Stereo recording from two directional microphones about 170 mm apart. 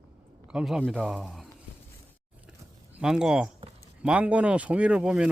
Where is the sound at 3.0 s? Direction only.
5° right (ahead or behind).